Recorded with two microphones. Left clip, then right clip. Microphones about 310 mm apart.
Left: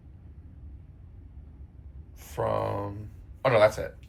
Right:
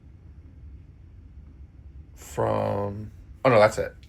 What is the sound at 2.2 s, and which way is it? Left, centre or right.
Speech, right.